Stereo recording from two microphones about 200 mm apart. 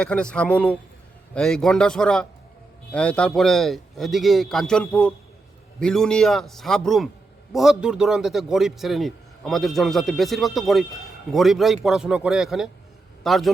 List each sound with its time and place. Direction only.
0.0 s a man's voice: 5° left (ahead or behind)